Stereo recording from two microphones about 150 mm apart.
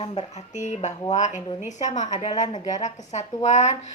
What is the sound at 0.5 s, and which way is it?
Speech, 50° left (ahead or behind).